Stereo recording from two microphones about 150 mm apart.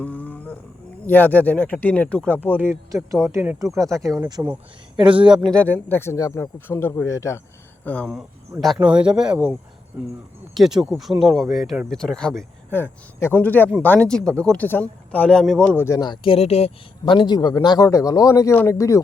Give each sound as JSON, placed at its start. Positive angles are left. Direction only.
{"t": 0.0, "sound": "a sound", "side_deg": 10}
{"t": 1.0, "sound": "speech", "side_deg": 15}
{"t": 2.6, "sound": "speech", "side_deg": -15}
{"t": 4.9, "sound": "speech", "side_deg": -30}
{"t": 5.5, "sound": "speech", "side_deg": 10}
{"t": 7.9, "sound": "speech", "side_deg": 10}
{"t": 8.6, "sound": "speech", "side_deg": -5}
{"t": 12.7, "sound": "speech", "side_deg": 15}
{"t": 15.8, "sound": "speech", "side_deg": 25}